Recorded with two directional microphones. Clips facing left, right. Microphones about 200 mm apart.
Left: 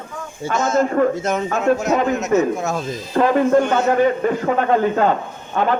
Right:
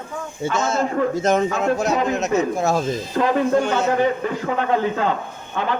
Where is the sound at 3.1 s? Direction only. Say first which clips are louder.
Left 4 dB; 50° left (ahead or behind).